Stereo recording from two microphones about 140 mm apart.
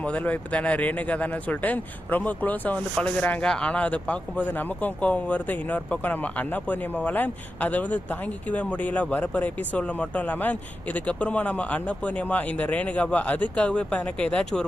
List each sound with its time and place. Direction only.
0.0 s speech: 10° left (ahead or behind)